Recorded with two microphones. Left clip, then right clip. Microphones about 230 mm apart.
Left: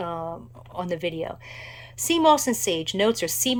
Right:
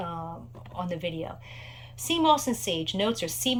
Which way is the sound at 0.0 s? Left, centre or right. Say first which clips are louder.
Left 5 dB; centre.